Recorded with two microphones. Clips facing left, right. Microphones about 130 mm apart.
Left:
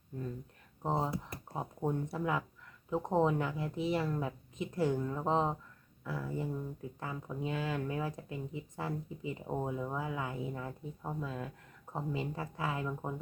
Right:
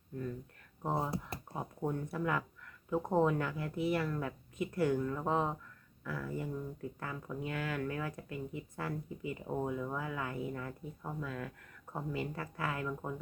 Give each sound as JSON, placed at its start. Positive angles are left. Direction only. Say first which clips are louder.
{"t": 0.8, "sound": "a woman's voice", "louder": "left 1 dB", "side_deg": 20}